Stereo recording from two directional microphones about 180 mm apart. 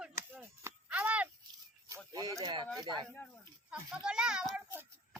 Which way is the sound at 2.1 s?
20° right (ahead or behind).